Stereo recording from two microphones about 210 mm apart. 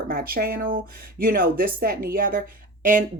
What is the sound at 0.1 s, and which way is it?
Speech, 45° right (ahead or behind).